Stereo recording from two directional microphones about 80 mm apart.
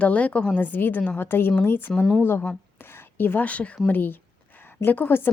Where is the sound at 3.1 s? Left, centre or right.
Left.